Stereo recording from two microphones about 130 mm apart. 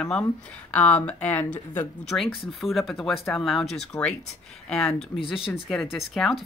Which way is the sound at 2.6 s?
Centre (ahead or behind).